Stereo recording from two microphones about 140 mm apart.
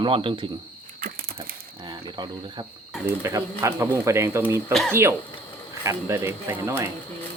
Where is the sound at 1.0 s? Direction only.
90° right.